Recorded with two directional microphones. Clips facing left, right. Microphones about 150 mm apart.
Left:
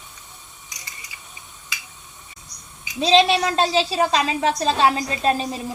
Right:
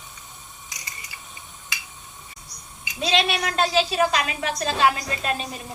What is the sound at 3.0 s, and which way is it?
A woman's voice, 30° left (ahead or behind).